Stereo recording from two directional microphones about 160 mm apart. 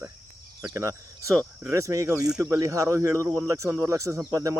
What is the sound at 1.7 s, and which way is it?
Speech, 20° right (ahead or behind).